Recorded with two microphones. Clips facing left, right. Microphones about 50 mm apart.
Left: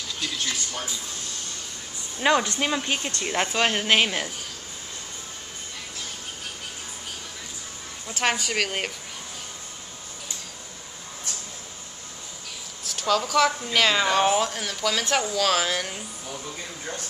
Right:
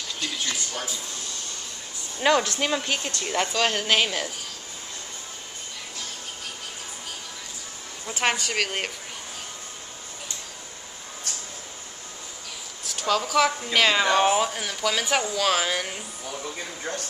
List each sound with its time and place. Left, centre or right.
0.2 s speech: centre
2.1 s speech: centre
8.1 s speech: centre
12.8 s speech: centre